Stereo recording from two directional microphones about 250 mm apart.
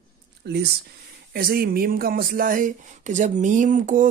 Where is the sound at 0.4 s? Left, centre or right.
Right.